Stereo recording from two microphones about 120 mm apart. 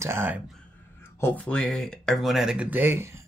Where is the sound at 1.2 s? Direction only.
10° left (ahead or behind).